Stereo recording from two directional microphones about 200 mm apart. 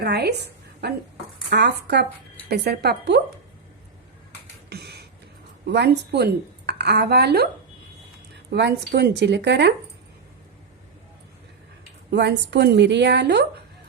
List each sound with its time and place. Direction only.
0.0 s a woman's voice: 55° right (ahead or behind)
4.7 s a sound: 55° right (ahead or behind)
5.6 s speech: 55° right (ahead or behind)
8.4 s speech: 55° right (ahead or behind)
12.1 s speech: 60° right (ahead or behind)